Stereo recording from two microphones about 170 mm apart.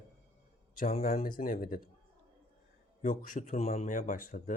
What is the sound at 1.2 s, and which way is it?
Speech, 55° left (ahead or behind).